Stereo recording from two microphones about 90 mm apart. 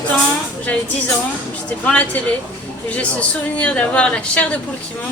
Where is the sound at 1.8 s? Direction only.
15° left (ahead or behind).